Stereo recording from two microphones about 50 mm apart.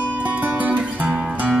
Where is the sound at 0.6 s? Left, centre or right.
Right.